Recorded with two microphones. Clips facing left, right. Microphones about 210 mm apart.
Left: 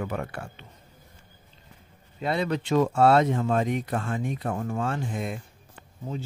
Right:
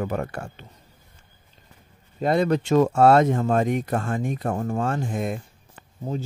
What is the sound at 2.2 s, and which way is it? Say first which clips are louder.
Speech: right 6 dB; 45° right (ahead or behind).